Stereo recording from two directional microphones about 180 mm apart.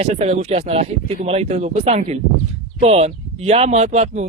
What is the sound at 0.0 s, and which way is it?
Speech, 35° right (ahead or behind).